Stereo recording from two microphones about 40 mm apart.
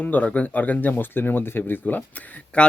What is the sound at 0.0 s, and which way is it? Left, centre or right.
Speech, left.